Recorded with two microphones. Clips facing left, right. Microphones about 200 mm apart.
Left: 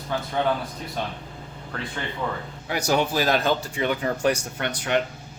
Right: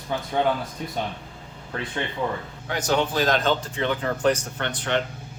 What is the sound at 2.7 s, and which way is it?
Speech, 10° left (ahead or behind).